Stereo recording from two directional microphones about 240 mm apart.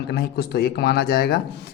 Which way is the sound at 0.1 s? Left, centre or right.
Left.